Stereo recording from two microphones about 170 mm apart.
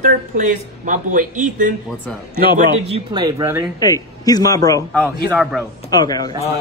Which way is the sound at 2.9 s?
25° right (ahead or behind).